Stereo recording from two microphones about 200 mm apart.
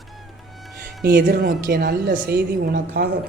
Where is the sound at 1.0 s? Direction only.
50° right (ahead or behind).